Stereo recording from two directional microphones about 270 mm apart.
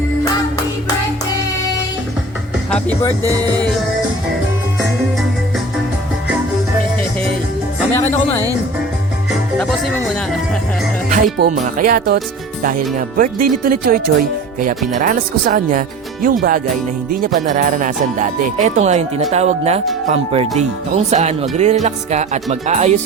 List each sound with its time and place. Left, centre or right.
2.6 s speech: centre
9.6 s music: centre
11.1 s speech: right